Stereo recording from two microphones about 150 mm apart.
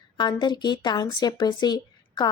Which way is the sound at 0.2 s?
30° left (ahead or behind).